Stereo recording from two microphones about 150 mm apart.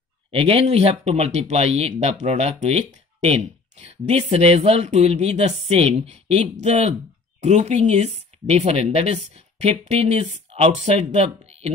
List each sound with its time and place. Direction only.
0.3 s speech: 40° right (ahead or behind)